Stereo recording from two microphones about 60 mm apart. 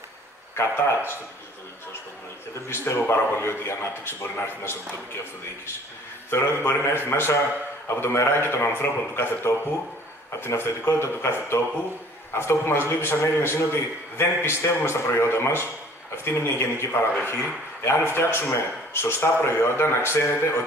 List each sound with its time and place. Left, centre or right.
0.6 s speech: left
2.7 s speech: left
6.3 s speech: left
17.2 s speech: left